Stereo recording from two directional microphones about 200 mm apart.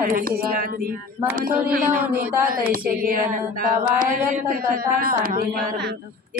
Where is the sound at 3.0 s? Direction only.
45° right (ahead or behind).